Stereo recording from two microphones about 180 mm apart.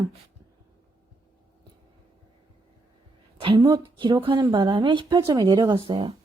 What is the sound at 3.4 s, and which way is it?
A woman's voice, 30° right (ahead or behind).